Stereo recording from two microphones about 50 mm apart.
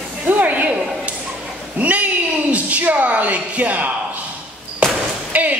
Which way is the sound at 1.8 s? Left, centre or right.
Right.